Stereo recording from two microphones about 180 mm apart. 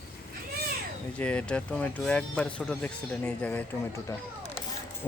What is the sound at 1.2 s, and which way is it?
Speech, 5° left (ahead or behind).